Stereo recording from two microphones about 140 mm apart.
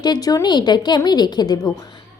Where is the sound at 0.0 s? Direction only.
30° left (ahead or behind).